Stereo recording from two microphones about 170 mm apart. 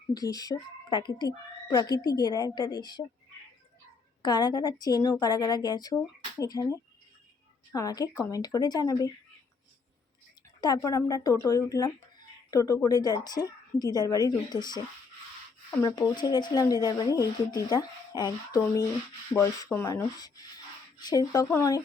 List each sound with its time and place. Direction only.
0.1 s speech: 20° left (ahead or behind)
4.2 s speech: 25° left (ahead or behind)
10.6 s speech: 20° left (ahead or behind)